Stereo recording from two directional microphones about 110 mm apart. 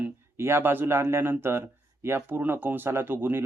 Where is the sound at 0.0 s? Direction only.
20° right (ahead or behind).